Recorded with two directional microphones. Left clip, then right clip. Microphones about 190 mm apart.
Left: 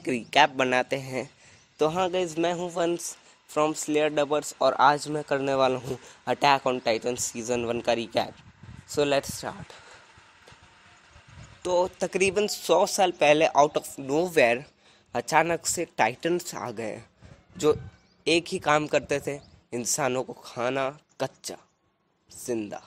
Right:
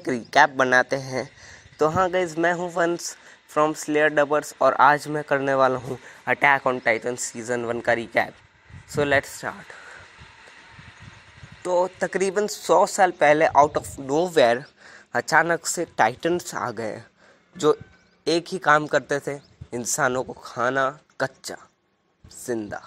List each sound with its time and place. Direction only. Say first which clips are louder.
0.1 s speech: right 3 dB; 5° right (ahead or behind)
0.8 s a man's voice: right 4 dB; 15° left (ahead or behind)
1.8 s speech: right 4 dB; 5° right (ahead or behind)
11.6 s speech: right 3 dB; 5° right (ahead or behind)
18.2 s speech: right 3 dB; 5° right (ahead or behind)